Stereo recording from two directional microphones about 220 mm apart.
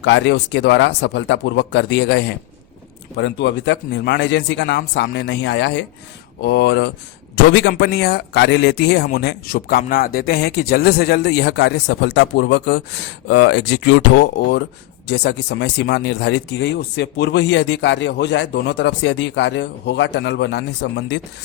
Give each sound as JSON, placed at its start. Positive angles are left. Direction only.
{"t": 0.0, "sound": "speech", "side_deg": 55}